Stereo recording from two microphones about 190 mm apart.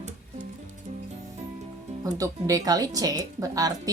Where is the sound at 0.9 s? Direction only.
40° right (ahead or behind).